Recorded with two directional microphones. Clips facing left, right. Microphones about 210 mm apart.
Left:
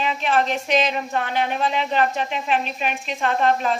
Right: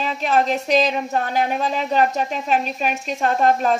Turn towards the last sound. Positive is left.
turn(degrees=-45)  # may be behind; listen again after turning